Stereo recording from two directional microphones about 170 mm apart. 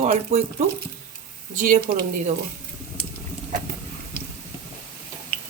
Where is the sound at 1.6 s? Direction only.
50° right (ahead or behind).